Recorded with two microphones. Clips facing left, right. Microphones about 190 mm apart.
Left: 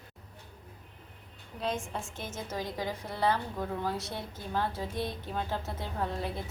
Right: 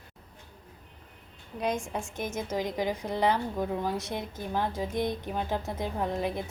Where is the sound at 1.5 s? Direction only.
15° right (ahead or behind).